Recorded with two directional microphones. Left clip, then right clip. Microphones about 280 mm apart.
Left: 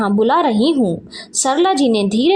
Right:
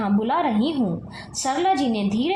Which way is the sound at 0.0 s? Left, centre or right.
Left.